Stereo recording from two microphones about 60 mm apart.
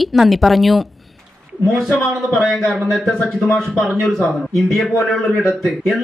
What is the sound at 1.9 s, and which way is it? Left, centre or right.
Speech, centre.